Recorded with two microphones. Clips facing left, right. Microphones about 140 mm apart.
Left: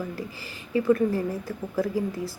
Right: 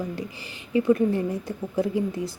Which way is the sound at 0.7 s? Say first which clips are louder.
Right 1 dB; 20° right (ahead or behind).